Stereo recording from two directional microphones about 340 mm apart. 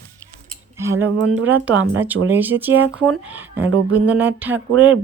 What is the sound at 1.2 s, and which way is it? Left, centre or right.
Speech, right.